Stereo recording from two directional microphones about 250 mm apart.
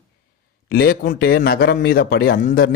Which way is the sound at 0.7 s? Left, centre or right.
Left.